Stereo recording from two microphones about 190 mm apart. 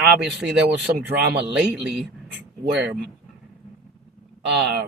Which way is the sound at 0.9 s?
55° right (ahead or behind).